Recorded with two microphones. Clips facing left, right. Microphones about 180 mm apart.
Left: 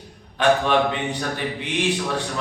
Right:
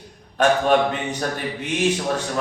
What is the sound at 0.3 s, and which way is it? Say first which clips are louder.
A man's voice: right 1 dB; 45° right (ahead or behind).